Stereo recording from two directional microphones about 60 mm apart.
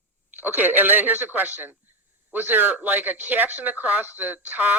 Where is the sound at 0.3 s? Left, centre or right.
Right.